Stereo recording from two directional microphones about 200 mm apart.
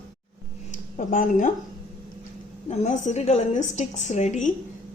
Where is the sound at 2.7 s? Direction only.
35° left (ahead or behind).